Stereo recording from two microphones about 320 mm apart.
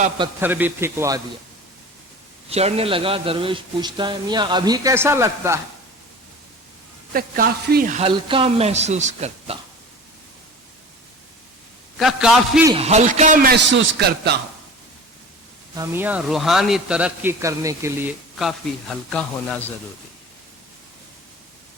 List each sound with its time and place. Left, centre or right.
0.3 s a man's voice: centre
2.5 s a man's voice: centre
7.1 s speech: right
11.9 s a man's voice: centre
12.7 s speech: centre
15.7 s a man's voice: centre